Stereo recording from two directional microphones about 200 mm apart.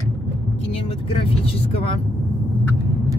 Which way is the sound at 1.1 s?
30° left (ahead or behind).